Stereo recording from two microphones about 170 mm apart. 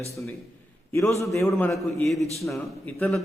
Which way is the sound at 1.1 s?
15° left (ahead or behind).